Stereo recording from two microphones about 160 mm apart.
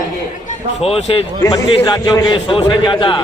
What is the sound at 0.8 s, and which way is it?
Speech, 35° left (ahead or behind).